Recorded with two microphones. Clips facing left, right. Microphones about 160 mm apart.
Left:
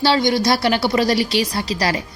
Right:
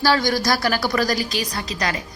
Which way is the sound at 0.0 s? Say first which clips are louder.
Left 3 dB; 25° left (ahead or behind).